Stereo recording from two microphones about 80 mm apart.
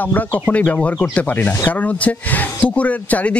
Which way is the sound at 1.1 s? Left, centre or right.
Left.